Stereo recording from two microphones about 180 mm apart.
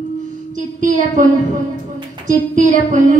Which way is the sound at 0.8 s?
45° right (ahead or behind).